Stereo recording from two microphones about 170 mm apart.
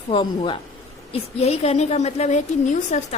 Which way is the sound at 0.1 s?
30° left (ahead or behind).